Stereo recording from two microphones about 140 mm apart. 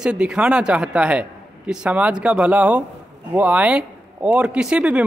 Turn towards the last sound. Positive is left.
turn(degrees=-5)  # may be behind; listen again after turning